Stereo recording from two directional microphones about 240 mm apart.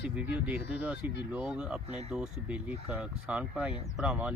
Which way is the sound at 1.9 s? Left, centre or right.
Right.